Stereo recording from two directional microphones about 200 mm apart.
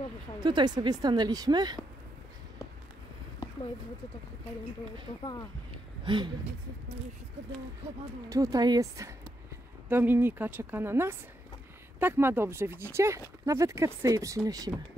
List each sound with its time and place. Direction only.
0.4 s a woman's voice: 20° right (ahead or behind)
5.7 s a sound: 25° right (ahead or behind)
8.3 s a woman's voice: 20° right (ahead or behind)